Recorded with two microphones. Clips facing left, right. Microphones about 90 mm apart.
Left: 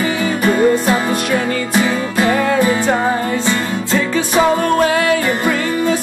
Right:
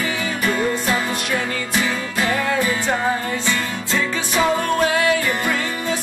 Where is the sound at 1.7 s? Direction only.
15° left (ahead or behind).